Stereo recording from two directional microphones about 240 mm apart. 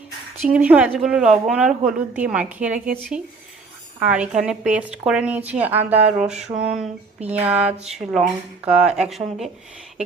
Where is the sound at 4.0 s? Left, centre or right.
Centre.